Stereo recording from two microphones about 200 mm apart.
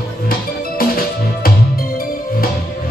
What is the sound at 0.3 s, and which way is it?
Music, 45° left (ahead or behind).